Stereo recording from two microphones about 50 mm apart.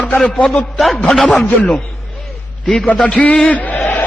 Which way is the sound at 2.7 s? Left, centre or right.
Centre.